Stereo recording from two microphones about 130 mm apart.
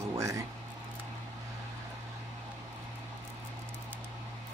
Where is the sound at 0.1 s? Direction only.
25° right (ahead or behind).